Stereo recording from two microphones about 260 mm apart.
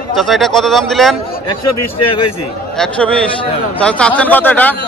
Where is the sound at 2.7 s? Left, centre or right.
Centre.